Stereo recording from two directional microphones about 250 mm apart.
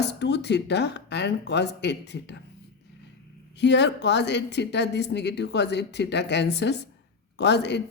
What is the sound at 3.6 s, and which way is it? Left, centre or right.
Speech, left.